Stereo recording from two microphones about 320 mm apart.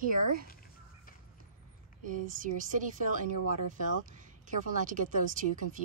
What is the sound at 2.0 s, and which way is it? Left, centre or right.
Speech, right.